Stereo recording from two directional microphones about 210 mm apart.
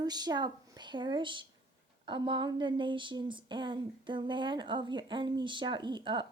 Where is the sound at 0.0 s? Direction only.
20° right (ahead or behind).